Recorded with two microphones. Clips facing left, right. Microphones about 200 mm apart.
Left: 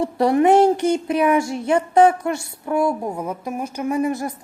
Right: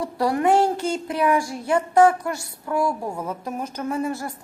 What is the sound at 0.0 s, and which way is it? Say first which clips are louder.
Speech: left 5 dB; 20° left (ahead or behind).